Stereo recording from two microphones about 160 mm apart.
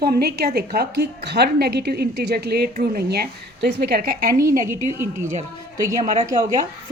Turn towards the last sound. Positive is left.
turn(degrees=-20)  # may be behind; listen again after turning